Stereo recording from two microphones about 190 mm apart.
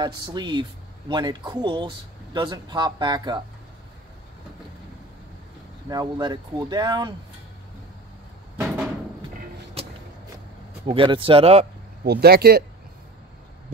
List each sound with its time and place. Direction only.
0.0 s speech: 20° right (ahead or behind)
5.9 s speech: 20° right (ahead or behind)
8.5 s a sound: centre (ahead or behind)
9.8 s vehicle: 30° right (ahead or behind)
10.9 s speech: 25° right (ahead or behind)
12.0 s speech: 55° right (ahead or behind)